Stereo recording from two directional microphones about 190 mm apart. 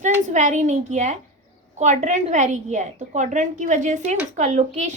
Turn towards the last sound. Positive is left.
turn(degrees=-35)  # may be behind; listen again after turning